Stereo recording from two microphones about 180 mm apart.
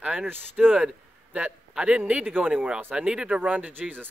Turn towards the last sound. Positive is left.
turn(degrees=-10)  # may be behind; listen again after turning